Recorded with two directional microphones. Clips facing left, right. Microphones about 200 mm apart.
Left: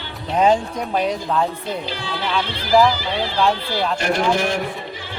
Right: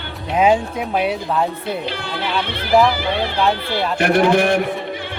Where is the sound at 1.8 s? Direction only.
60° right (ahead or behind).